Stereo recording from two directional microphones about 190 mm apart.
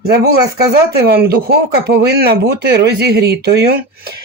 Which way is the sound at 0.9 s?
55° right (ahead or behind).